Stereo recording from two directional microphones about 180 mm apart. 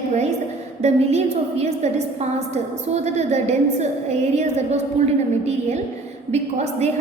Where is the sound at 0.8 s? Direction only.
35° right (ahead or behind).